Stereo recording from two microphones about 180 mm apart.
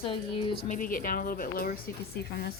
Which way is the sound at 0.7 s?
50° left (ahead or behind).